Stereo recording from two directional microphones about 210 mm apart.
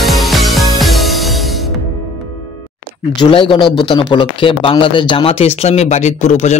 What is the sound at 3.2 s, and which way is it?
A man's voice, 25° left (ahead or behind).